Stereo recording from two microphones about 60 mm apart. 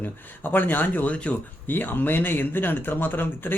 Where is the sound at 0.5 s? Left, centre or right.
Left.